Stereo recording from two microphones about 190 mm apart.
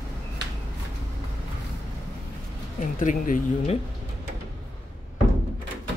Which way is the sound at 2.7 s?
45° left (ahead or behind).